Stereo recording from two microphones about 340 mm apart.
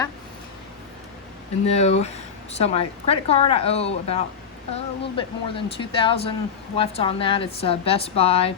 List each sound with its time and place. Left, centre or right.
1.6 s a woman's voice: centre